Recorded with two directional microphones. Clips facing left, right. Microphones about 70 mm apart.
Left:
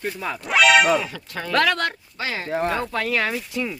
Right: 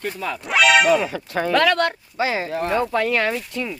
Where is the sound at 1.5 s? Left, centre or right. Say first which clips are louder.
Right 2 dB; centre.